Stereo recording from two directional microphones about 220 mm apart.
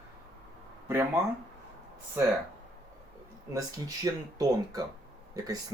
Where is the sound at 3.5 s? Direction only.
15° right (ahead or behind).